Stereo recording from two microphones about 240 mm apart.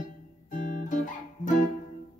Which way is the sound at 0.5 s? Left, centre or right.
Left.